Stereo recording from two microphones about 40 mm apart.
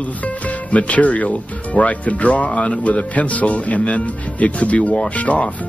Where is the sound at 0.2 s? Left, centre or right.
Left.